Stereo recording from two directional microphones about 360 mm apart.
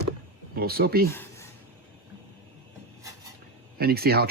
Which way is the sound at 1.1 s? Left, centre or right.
Centre.